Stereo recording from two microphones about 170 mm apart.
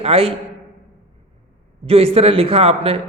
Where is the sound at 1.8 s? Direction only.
35° right (ahead or behind).